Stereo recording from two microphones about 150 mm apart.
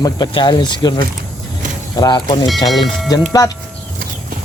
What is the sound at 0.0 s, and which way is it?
Speech, 30° left (ahead or behind).